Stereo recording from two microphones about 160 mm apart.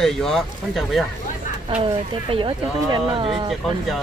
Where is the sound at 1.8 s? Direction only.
35° right (ahead or behind).